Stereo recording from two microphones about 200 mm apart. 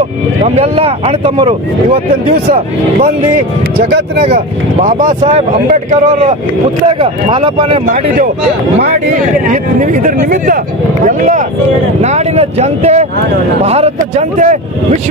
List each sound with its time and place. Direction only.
0.6 s speech: 30° right (ahead or behind)
2.3 s speech: 45° right (ahead or behind)
4.8 s speech: 35° right (ahead or behind)
6.9 s speech: 25° right (ahead or behind)
7.8 s speech: 40° right (ahead or behind)
9.5 s speech: 40° right (ahead or behind)